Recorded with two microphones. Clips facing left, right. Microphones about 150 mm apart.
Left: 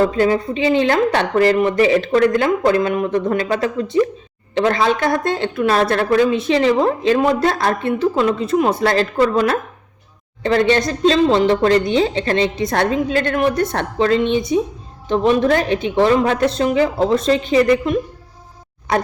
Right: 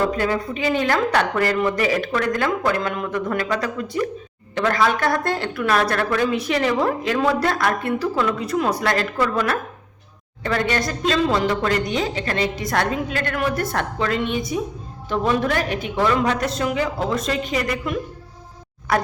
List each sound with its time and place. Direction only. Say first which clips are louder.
0.1 s a woman's voice: left 6 dB; 25° left (ahead or behind)